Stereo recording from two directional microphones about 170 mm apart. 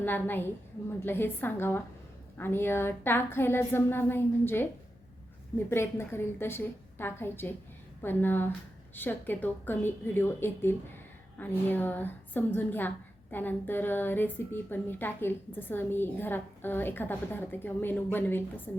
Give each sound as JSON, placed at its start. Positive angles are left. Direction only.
{"t": 0.0, "sound": "a woman's voice", "side_deg": 10}
{"t": 5.7, "sound": "a woman's voice", "side_deg": 15}